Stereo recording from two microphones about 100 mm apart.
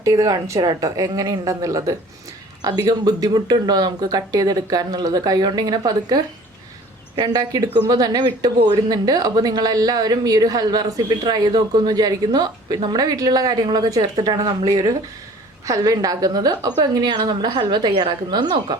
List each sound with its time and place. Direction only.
0.0 s speech: 35° right (ahead or behind)